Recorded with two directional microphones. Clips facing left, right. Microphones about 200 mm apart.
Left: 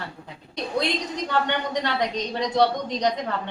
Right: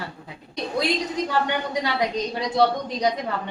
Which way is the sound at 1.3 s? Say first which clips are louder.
Left 3 dB; 10° right (ahead or behind).